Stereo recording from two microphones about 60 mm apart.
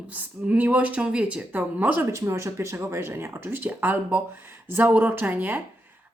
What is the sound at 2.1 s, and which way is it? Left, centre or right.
A woman's voice, right.